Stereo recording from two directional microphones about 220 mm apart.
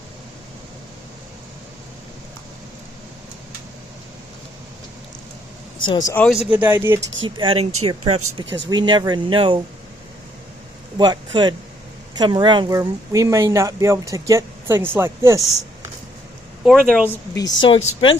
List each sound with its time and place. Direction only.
5.8 s speech: 20° left (ahead or behind)
6.2 s speech: centre (ahead or behind)
7.3 s speech: 25° right (ahead or behind)
10.9 s speech: 20° right (ahead or behind)
16.6 s speech: 5° right (ahead or behind)
17.1 s a woman's voice: 15° left (ahead or behind)